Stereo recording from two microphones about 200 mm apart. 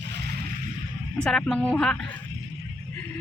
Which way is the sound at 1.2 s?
5° left (ahead or behind).